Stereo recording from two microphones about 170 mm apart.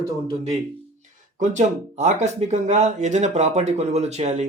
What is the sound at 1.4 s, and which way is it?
Speech, 45° right (ahead or behind).